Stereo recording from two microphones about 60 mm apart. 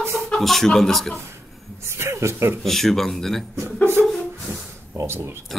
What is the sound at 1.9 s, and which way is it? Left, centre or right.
Speech, right.